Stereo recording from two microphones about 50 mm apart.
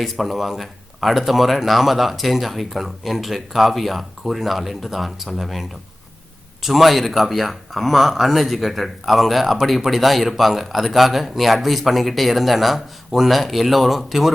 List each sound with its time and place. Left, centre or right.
0.0 s speech: centre